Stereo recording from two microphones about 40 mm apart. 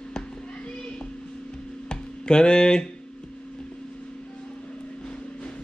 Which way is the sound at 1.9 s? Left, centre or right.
Left.